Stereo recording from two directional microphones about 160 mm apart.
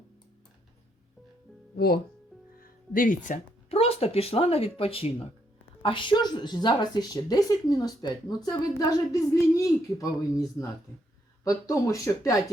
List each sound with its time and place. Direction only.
1.7 s speech: 75° left (ahead or behind)
2.9 s speech: 55° left (ahead or behind)
3.7 s a woman's voice: 40° left (ahead or behind); by 12.3 s 20° left (ahead or behind)